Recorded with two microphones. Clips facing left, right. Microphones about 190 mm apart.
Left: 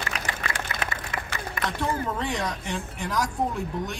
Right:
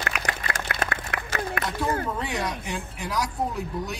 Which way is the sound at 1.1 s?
65° right (ahead or behind).